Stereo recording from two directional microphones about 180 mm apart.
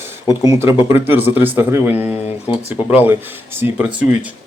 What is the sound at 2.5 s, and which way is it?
Speech, 30° left (ahead or behind).